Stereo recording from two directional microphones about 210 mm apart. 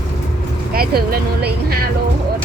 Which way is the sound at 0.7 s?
45° right (ahead or behind).